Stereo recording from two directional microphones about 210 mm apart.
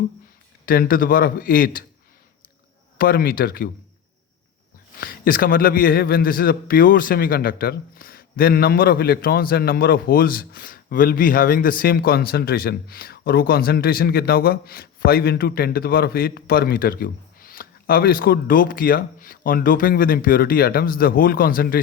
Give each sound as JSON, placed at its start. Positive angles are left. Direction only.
{"t": 0.6, "sound": "a man's voice", "side_deg": 45}
{"t": 3.0, "sound": "a man's voice", "side_deg": 45}
{"t": 4.9, "sound": "a man's voice", "side_deg": 45}